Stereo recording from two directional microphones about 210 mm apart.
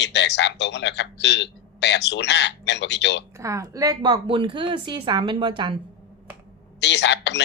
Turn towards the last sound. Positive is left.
turn(degrees=55)  # may be behind; listen again after turning